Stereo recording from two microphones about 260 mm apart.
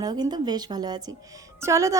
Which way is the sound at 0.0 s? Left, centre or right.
Centre.